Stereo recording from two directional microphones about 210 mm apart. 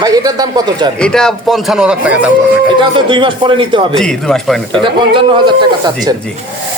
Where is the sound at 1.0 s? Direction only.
5° left (ahead or behind).